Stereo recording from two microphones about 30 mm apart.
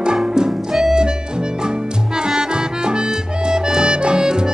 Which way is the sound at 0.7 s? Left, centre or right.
Centre.